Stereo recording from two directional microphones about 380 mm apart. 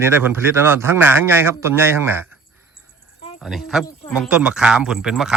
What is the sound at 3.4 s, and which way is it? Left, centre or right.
A man's voice, centre.